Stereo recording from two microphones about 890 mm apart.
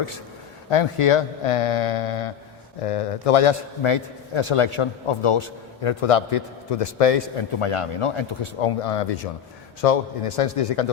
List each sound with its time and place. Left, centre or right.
0.7 s a man's voice: left